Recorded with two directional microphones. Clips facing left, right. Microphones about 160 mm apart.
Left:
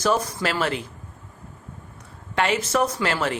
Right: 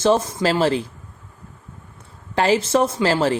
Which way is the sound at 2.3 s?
30° right (ahead or behind).